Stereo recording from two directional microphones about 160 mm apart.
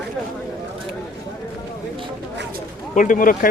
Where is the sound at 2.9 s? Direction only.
55° left (ahead or behind).